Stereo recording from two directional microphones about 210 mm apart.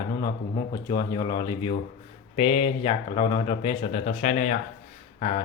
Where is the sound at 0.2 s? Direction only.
15° left (ahead or behind).